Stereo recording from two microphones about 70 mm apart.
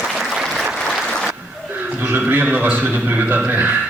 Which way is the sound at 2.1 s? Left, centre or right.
Right.